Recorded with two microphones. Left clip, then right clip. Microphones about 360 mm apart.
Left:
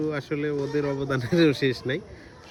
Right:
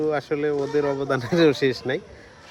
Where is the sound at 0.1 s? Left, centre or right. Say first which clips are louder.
Right 5 dB; centre.